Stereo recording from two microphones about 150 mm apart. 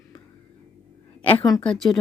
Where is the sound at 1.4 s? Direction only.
25° left (ahead or behind).